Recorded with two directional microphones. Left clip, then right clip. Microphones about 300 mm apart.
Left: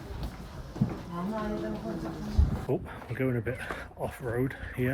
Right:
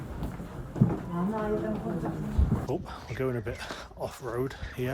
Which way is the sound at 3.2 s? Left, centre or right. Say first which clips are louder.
Left 1 dB; centre.